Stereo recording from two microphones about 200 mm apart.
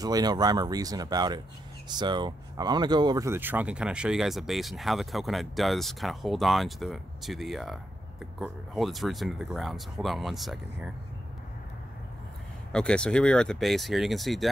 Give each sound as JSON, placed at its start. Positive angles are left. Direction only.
{"t": 0.0, "sound": "speech", "side_deg": -20}
{"t": 12.7, "sound": "speech", "side_deg": 5}